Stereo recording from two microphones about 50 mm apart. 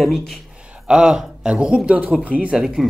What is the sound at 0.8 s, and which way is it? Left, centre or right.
Speech, centre.